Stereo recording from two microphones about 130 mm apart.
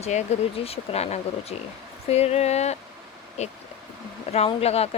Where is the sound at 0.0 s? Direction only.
65° left (ahead or behind).